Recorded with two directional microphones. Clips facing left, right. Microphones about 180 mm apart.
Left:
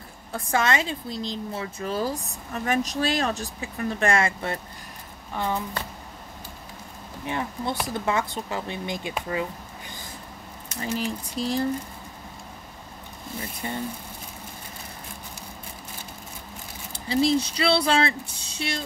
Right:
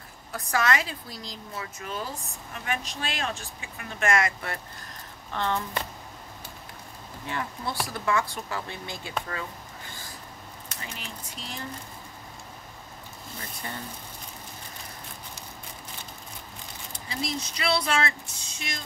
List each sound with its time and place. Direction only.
0.3 s speech: 25° left (ahead or behind)
5.3 s speech: 10° left (ahead or behind)
7.2 s speech: 20° left (ahead or behind)
10.8 s speech: 35° left (ahead or behind)
13.6 s speech: 20° left (ahead or behind)
16.9 s speech: 30° left (ahead or behind)